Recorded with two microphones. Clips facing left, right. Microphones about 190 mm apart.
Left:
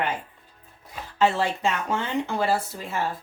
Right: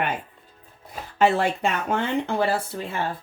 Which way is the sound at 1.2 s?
60° right (ahead or behind).